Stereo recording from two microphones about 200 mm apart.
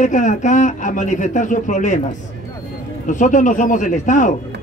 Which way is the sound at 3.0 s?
40° left (ahead or behind).